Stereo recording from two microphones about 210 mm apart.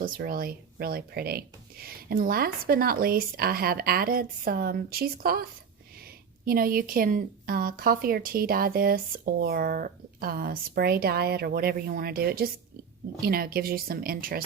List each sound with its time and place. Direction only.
0.0 s a woman's voice: 45° right (ahead or behind)